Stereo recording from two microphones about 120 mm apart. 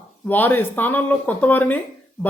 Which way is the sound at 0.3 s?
15° left (ahead or behind).